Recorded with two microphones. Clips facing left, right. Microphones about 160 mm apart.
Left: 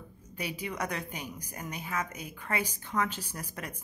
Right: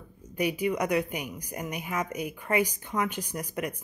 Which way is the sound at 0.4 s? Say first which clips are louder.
Right 8 dB; 15° right (ahead or behind).